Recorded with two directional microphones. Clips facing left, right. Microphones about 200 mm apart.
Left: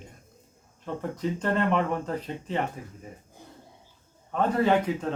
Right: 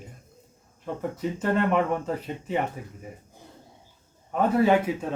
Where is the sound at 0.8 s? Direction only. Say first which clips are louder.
Right 1 dB; 10° right (ahead or behind).